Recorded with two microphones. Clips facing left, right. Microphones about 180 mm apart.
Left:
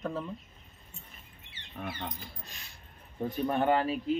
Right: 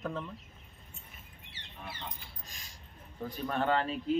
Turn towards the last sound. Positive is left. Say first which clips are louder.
# left 3 dB
turn(degrees=10)  # may be behind; listen again after turning